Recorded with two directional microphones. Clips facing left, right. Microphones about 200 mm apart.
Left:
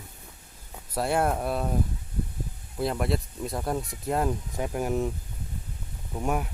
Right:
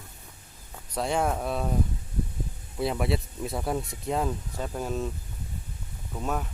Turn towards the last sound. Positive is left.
turn(degrees=15)  # may be behind; listen again after turning